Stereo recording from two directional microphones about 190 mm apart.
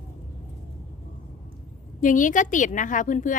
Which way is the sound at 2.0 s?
45° left (ahead or behind).